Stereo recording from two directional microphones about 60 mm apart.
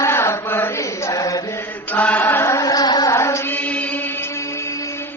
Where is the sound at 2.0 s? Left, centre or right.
Left.